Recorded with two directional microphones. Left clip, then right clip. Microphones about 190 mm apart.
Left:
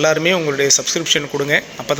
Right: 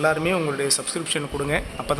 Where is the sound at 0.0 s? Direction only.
15° left (ahead or behind).